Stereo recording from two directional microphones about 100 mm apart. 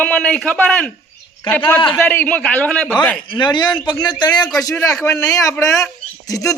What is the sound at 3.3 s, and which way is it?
A man's voice, 50° left (ahead or behind).